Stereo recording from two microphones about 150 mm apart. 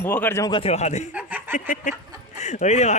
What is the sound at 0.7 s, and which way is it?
Speech, 50° left (ahead or behind).